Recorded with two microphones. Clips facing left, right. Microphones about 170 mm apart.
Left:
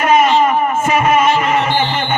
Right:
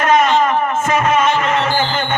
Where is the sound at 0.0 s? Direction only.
10° left (ahead or behind).